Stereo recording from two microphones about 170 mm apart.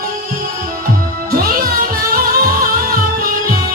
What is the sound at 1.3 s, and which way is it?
Music, 60° right (ahead or behind).